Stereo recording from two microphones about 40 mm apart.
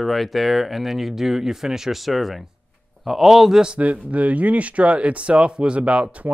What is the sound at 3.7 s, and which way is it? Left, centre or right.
Speech, right.